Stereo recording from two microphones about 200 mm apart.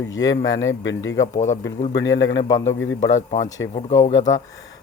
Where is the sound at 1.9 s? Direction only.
65° left (ahead or behind).